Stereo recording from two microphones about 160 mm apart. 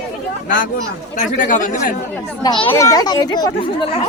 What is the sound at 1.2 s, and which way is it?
Speech, 50° left (ahead or behind).